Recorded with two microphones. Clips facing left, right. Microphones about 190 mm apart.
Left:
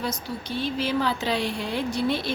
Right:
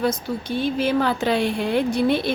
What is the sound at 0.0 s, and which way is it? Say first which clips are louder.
A woman's voice: right 7 dB; 50° right (ahead or behind).